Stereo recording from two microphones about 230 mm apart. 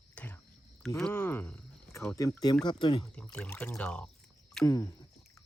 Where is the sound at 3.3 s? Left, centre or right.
Centre.